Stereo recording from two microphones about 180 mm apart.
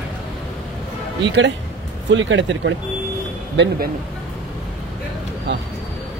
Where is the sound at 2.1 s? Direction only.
90° right.